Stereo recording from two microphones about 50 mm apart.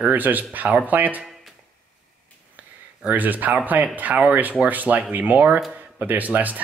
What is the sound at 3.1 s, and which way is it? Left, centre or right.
Speech, right.